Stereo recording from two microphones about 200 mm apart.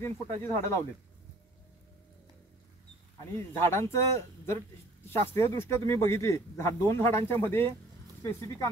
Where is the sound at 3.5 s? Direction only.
10° left (ahead or behind).